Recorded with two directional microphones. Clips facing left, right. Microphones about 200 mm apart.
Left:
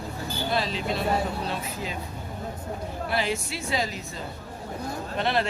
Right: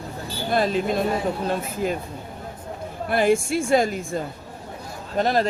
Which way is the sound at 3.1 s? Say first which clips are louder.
Right 10 dB; 50° right (ahead or behind).